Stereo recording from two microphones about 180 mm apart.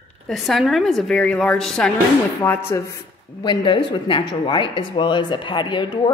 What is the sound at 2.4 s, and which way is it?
Speech, 15° left (ahead or behind).